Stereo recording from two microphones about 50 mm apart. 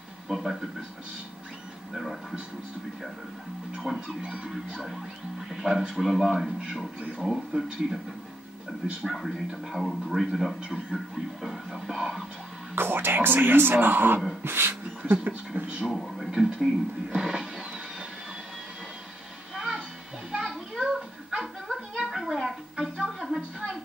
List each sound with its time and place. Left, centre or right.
0.3 s speech: centre
3.9 s music: centre
4.2 s speech: right
5.5 s music: centre
7.0 s speech: right
7.2 s music: centre
9.0 s speech: centre
11.4 s music: centre
12.7 s speech: right
14.4 s dog: right
15.2 s speech: right
16.3 s music: centre
17.1 s a sound: centre
19.5 s music: centre